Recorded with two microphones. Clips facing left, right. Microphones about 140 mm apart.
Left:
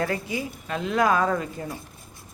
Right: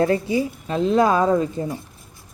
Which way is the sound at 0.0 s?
30° right (ahead or behind).